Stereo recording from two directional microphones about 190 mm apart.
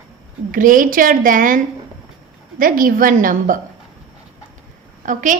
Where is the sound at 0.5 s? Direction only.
45° right (ahead or behind).